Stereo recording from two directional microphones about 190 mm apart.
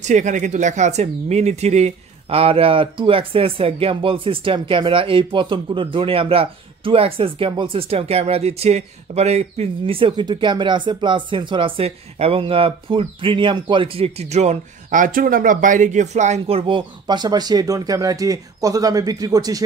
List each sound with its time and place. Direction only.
0.0 s speech: 40° right (ahead or behind); by 19.6 s 20° right (ahead or behind)